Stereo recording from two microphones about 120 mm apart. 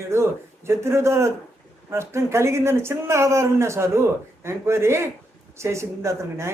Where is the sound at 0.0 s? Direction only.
25° right (ahead or behind).